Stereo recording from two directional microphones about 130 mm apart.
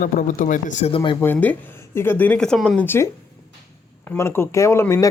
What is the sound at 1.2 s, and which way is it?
Speech, 15° left (ahead or behind).